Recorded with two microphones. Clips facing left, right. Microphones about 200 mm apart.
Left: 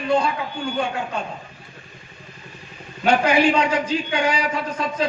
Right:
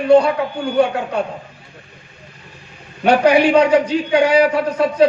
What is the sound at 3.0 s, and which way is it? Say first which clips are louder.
A man's voice: right 5 dB; 65° right (ahead or behind).